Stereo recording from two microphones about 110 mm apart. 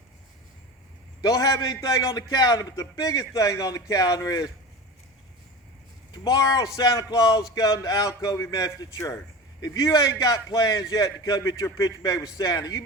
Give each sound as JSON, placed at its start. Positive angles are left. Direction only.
{"t": 1.2, "sound": "a man's voice", "side_deg": 35}
{"t": 6.1, "sound": "a man's voice", "side_deg": 35}